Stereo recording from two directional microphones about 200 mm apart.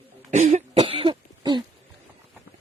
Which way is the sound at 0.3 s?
35° right (ahead or behind).